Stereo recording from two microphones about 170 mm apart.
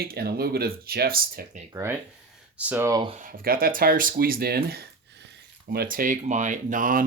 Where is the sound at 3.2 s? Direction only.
60° right (ahead or behind).